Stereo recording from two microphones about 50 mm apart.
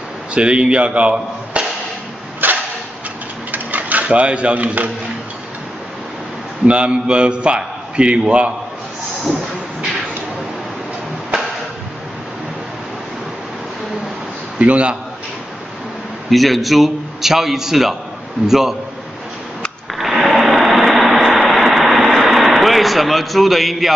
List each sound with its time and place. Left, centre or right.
0.3 s speech: right
2.4 s a sound: right
3.5 s dishes: right
6.6 s a man's voice: right
14.6 s a man's voice: right
16.3 s a man's voice: centre
19.9 s a sound: centre